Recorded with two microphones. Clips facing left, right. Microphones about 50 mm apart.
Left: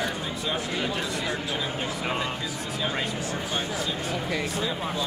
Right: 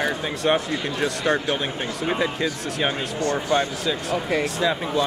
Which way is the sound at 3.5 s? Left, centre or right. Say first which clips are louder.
Right 7 dB; right.